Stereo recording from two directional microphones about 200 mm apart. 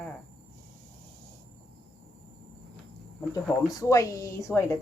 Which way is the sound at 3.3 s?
15° left (ahead or behind).